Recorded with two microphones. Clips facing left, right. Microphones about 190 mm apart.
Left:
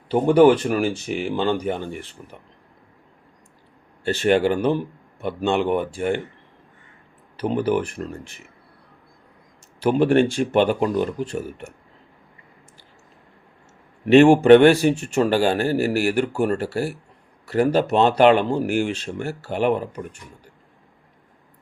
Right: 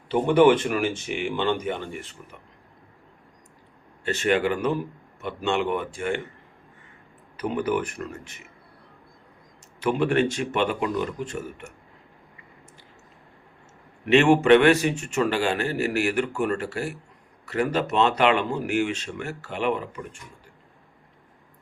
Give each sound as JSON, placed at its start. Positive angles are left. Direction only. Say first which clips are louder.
{"t": 0.1, "sound": "speech", "louder": "left 3 dB", "side_deg": 35}
{"t": 4.1, "sound": "speech", "louder": "left 4 dB", "side_deg": 35}
{"t": 7.3, "sound": "speech", "louder": "left 4 dB", "side_deg": 30}
{"t": 9.8, "sound": "speech", "louder": "left 5 dB", "side_deg": 35}
{"t": 14.0, "sound": "speech", "louder": "left 5 dB", "side_deg": 35}